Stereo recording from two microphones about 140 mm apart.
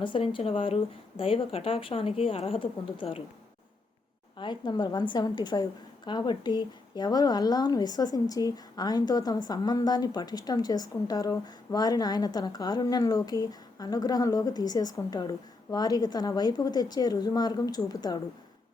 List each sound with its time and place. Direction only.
0.0 s speech: 35° left (ahead or behind)
4.4 s a woman's voice: 35° left (ahead or behind)